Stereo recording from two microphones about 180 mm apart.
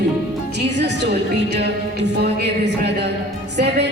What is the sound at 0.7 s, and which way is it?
Speech, 70° right (ahead or behind).